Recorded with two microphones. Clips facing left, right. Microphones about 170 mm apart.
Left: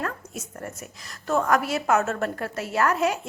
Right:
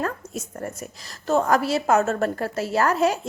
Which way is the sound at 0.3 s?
35° right (ahead or behind).